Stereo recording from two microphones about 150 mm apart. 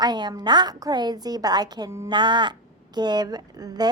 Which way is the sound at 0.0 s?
30° right (ahead or behind).